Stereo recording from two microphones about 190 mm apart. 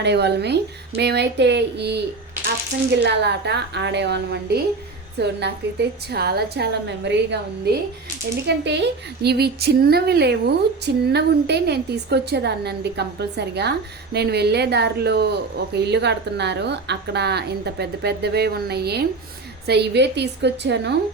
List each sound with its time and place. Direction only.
0.0 s a woman's voice: 65° right (ahead or behind)